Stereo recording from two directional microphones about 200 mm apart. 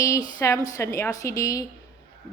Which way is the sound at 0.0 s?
15° left (ahead or behind).